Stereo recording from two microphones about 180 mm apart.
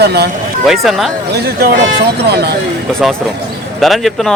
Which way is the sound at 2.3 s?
65° right (ahead or behind).